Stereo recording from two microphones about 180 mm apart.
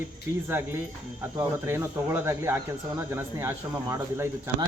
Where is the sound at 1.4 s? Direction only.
15° right (ahead or behind).